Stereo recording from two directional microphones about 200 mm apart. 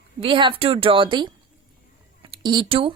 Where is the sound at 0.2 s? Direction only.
25° right (ahead or behind).